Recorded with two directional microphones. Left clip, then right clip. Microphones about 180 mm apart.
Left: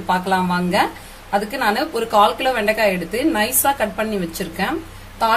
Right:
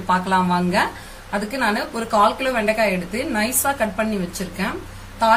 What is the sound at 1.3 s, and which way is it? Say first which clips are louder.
A woman's voice: left 3 dB; 45° left (ahead or behind).